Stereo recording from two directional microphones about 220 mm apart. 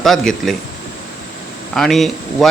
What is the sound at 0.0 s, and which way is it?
Speech, centre (ahead or behind).